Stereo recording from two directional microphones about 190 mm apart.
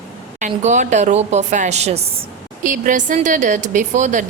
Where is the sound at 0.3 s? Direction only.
40° right (ahead or behind).